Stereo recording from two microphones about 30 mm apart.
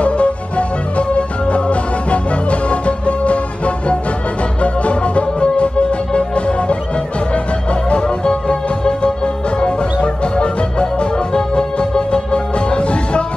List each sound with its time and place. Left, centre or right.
0.0 s music: left
8.2 s music: left